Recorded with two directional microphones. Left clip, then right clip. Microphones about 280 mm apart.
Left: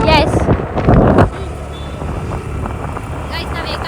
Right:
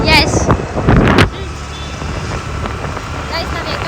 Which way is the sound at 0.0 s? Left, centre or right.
Centre.